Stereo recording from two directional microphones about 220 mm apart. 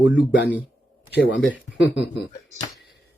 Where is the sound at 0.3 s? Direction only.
50° left (ahead or behind).